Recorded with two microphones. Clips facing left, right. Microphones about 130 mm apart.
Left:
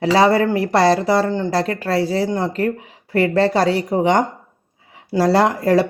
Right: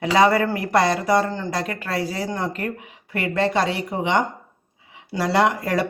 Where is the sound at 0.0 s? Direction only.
30° left (ahead or behind).